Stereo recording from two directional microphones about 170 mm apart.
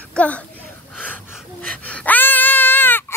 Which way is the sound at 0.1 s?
5° left (ahead or behind).